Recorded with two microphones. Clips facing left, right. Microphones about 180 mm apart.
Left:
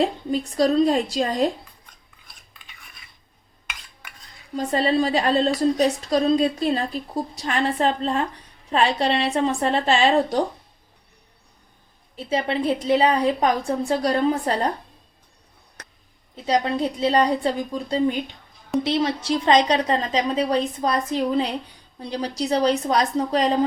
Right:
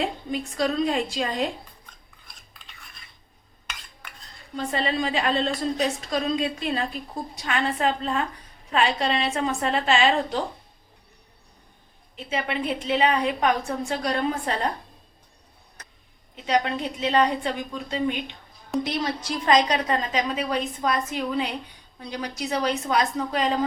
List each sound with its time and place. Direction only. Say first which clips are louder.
0.0 s a woman's voice: left 5 dB; 35° left (ahead or behind)
4.5 s a woman's voice: left 6 dB; 40° left (ahead or behind)
12.1 s a woman's voice: left 5 dB; 35° left (ahead or behind)
16.3 s a woman's voice: left 2 dB; 35° left (ahead or behind)